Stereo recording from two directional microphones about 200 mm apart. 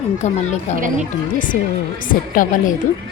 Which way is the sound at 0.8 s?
40° right (ahead or behind).